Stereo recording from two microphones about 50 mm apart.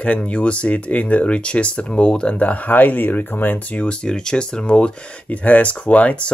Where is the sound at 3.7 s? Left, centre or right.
Centre.